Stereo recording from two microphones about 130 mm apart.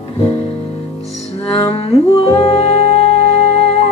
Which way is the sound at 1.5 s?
45° left (ahead or behind).